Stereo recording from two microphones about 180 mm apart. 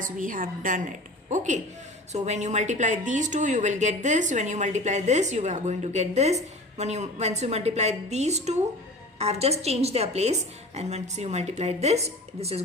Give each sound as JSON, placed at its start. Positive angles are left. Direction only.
{"t": 0.0, "sound": "a woman's voice", "side_deg": -50}